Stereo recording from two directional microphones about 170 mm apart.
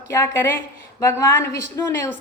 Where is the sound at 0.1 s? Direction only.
15° left (ahead or behind).